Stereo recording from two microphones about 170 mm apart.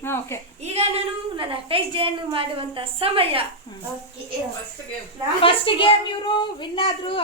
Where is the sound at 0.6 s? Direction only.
40° right (ahead or behind).